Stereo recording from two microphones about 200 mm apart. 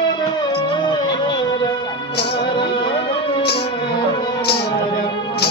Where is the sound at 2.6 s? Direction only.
25° left (ahead or behind).